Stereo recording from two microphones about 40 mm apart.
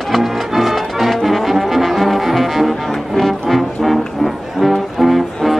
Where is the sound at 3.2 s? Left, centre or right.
Centre.